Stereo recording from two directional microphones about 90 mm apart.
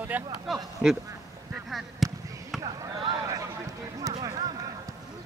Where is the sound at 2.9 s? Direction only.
40° right (ahead or behind).